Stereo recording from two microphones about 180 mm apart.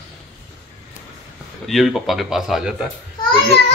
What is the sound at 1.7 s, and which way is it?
Speech, centre (ahead or behind).